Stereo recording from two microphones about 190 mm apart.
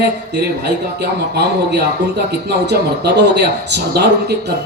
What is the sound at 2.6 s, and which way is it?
Speech, 60° right (ahead or behind).